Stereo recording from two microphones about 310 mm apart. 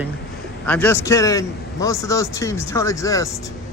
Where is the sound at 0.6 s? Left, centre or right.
Centre.